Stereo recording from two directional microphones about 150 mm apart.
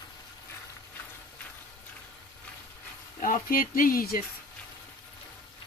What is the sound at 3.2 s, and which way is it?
Speech, 65° left (ahead or behind).